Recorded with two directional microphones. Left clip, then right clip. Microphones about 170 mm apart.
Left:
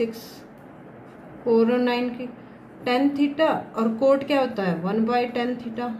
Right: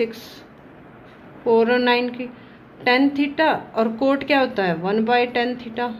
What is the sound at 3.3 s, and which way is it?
A woman's voice, 40° right (ahead or behind).